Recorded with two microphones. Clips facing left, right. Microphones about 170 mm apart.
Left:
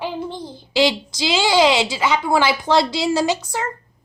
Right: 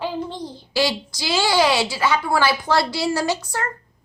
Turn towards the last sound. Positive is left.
turn(degrees=20)  # may be behind; listen again after turning